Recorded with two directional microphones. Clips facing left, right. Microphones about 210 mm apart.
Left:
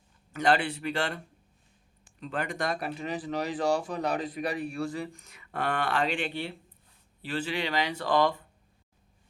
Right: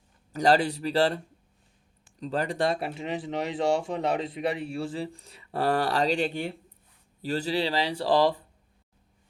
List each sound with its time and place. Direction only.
0.3 s speech: 35° right (ahead or behind)